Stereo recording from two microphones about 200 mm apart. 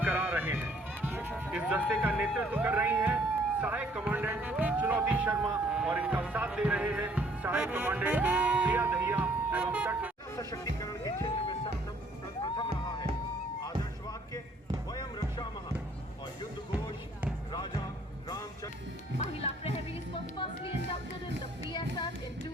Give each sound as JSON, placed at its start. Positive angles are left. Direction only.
{"t": 0.0, "sound": "music", "side_deg": -10}
{"t": 3.6, "sound": "speech", "side_deg": -10}
{"t": 10.3, "sound": "music", "side_deg": 15}
{"t": 14.8, "sound": "music", "side_deg": 20}
{"t": 18.3, "sound": "music", "side_deg": 20}
{"t": 19.2, "sound": "music", "side_deg": 30}
{"t": 21.7, "sound": "child singing", "side_deg": 20}